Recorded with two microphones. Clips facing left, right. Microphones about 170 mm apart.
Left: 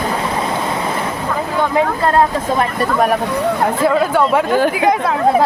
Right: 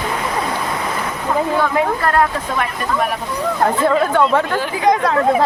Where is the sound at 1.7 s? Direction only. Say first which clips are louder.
Left 5 dB; 25° left (ahead or behind).